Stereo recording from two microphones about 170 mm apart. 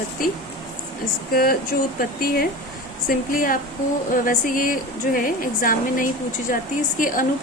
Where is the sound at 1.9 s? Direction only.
60° left (ahead or behind).